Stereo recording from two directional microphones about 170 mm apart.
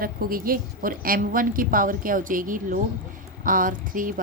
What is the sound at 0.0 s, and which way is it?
Speech, 60° right (ahead or behind).